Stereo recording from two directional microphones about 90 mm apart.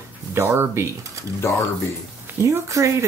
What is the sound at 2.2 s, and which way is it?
Speech, 30° right (ahead or behind).